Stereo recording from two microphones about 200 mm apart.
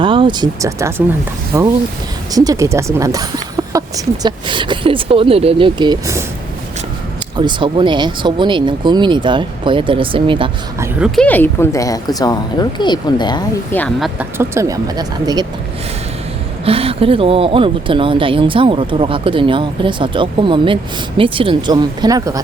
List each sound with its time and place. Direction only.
0.0 s speech: 25° right (ahead or behind)
7.3 s speech: 25° right (ahead or behind)
10.8 s a woman's voice: centre (ahead or behind); by 13.4 s 20° left (ahead or behind)
13.7 s speech: 5° left (ahead or behind)
14.2 s speech: 10° right (ahead or behind)
16.6 s speech: 30° right (ahead or behind)